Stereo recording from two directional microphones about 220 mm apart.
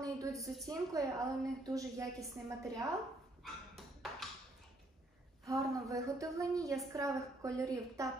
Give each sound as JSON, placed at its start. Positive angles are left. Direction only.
{"t": 0.0, "sound": "a sound", "side_deg": -15}
{"t": 0.7, "sound": "a woman's voice", "side_deg": -15}
{"t": 3.7, "sound": "tap", "side_deg": 0}
{"t": 5.4, "sound": "a woman's voice", "side_deg": -15}